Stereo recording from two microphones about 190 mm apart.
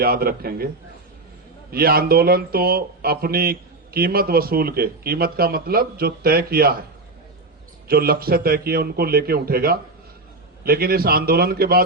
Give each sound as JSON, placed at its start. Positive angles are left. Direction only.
{"t": 0.0, "sound": "speech", "side_deg": -50}
{"t": 1.7, "sound": "speech", "side_deg": -55}
{"t": 7.9, "sound": "speech", "side_deg": -50}